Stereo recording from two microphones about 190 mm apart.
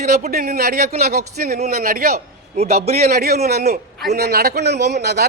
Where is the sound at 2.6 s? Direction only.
35° right (ahead or behind).